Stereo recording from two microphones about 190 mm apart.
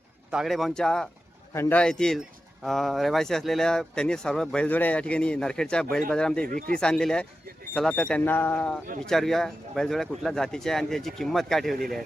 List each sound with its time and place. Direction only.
0.3 s speech: centre (ahead or behind)
6.5 s speech: 45° right (ahead or behind)
6.7 s speech: 5° left (ahead or behind)